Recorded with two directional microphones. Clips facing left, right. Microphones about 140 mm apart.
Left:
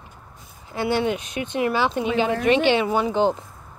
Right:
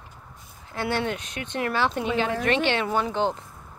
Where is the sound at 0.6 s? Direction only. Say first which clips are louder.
Left 5 dB; 5° left (ahead or behind).